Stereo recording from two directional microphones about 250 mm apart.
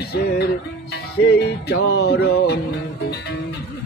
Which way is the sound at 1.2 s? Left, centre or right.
Left.